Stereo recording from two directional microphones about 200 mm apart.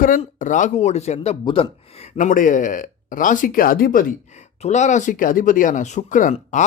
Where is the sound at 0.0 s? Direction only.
40° left (ahead or behind).